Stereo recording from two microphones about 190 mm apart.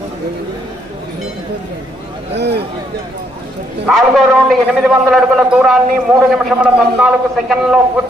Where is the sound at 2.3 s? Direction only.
60° right (ahead or behind).